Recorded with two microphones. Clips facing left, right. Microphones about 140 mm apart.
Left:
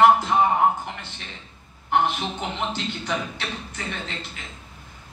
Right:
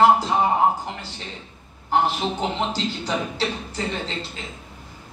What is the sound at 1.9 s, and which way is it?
A man's voice, 35° right (ahead or behind).